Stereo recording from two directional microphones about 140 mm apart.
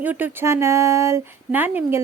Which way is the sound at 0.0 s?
10° right (ahead or behind).